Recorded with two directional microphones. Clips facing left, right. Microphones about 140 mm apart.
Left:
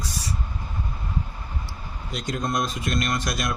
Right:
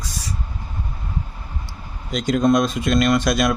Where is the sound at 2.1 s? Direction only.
85° right.